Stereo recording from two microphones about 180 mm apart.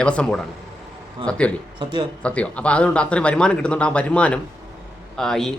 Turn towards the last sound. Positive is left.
turn(degrees=0)  # may be behind; listen again after turning